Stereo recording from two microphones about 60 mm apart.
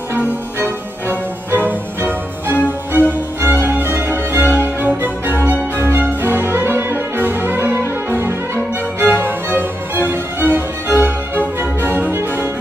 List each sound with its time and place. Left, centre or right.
0.1 s music: right